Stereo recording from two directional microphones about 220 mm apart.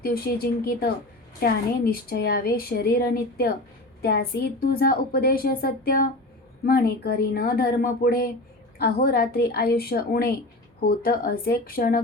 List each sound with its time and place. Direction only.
0.0 s a woman's voice: 45° left (ahead or behind)